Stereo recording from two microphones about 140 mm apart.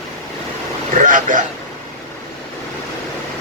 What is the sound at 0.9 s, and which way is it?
Speech, 70° right (ahead or behind).